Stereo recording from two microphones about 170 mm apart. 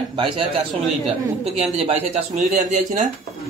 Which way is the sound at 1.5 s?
35° right (ahead or behind).